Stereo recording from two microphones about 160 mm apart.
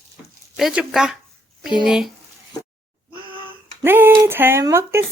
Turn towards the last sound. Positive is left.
turn(degrees=-15)  # may be behind; listen again after turning